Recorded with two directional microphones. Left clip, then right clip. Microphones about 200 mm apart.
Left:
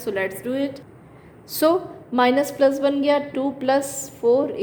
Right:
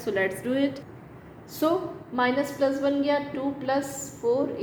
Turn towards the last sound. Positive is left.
turn(degrees=60)  # may be behind; listen again after turning